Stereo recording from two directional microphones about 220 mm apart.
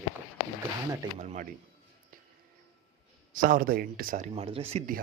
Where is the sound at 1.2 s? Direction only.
35° right (ahead or behind).